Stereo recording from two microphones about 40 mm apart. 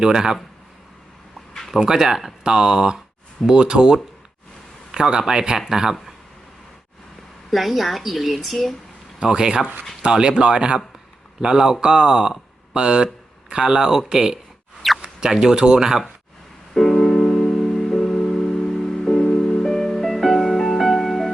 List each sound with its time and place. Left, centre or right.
0.0 s speech: centre
1.7 s speech: centre
7.5 s a woman's voice: centre
9.2 s speech: centre
16.7 s music: centre